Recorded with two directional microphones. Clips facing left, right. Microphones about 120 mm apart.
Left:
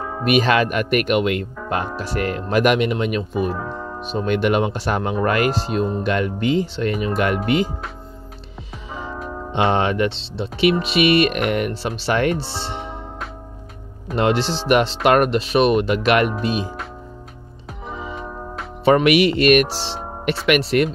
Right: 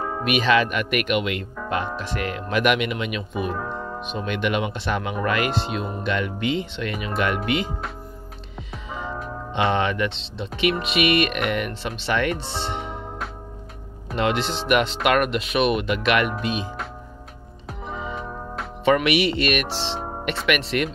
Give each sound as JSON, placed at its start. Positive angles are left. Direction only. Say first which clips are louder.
{"t": 0.2, "sound": "speech", "louder": "left 3 dB", "side_deg": 40}
{"t": 9.7, "sound": "speech", "louder": "left 4 dB", "side_deg": 35}
{"t": 14.1, "sound": "speech", "louder": "left 4 dB", "side_deg": 35}
{"t": 17.8, "sound": "music", "louder": "left 1 dB", "side_deg": 0}
{"t": 18.9, "sound": "speech", "louder": "left 5 dB", "side_deg": 40}